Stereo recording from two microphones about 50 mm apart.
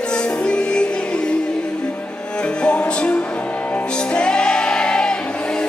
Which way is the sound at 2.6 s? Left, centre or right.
Centre.